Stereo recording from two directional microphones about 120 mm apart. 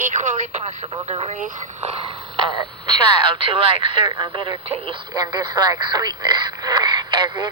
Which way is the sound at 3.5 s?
45° right (ahead or behind).